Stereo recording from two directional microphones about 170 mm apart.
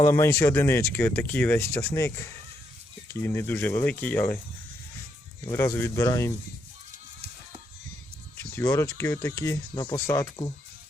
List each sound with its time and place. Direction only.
0.0 s speech: 15° left (ahead or behind)
5.5 s speech: 15° left (ahead or behind)
8.4 s speech: 15° left (ahead or behind)